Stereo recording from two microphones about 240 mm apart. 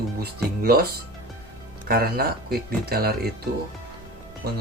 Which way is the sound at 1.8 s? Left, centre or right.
Right.